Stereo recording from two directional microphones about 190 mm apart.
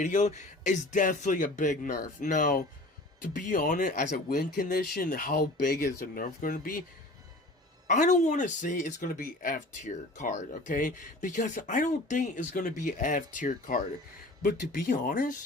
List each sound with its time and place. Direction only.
0.0 s speech: 40° left (ahead or behind)
7.9 s speech: 40° left (ahead or behind)